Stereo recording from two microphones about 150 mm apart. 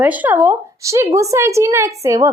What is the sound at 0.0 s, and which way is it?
A woman's voice, 10° right (ahead or behind).